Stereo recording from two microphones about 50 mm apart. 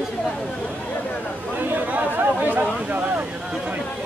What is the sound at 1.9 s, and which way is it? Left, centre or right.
Chatter, right.